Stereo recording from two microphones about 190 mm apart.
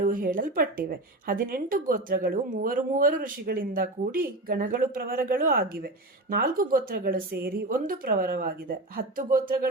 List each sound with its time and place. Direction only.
0.0 s a woman's voice: 45° right (ahead or behind)